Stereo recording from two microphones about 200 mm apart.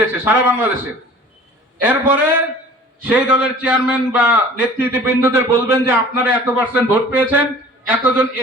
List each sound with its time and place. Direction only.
0.0 s a man's voice: 10° right (ahead or behind)
1.8 s a man's voice: 10° right (ahead or behind)